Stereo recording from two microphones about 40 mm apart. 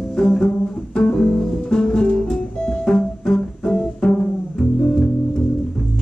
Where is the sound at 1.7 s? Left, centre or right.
Centre.